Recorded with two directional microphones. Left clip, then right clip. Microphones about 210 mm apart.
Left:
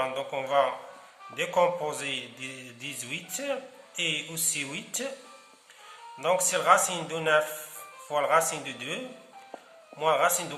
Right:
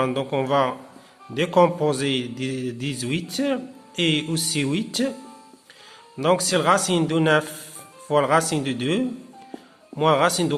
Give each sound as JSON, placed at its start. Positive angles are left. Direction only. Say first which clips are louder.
{"t": 0.0, "sound": "speech", "louder": "right 7 dB", "side_deg": -40}
{"t": 6.1, "sound": "speech", "louder": "right 6 dB", "side_deg": -40}
{"t": 10.0, "sound": "speech", "louder": "right 5 dB", "side_deg": -40}